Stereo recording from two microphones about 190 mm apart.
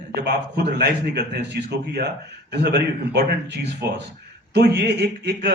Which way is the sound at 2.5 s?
60° right (ahead or behind).